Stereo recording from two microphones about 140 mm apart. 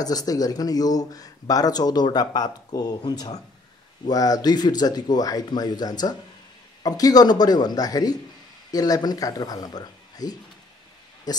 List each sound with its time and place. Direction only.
0.0 s speech: 25° left (ahead or behind)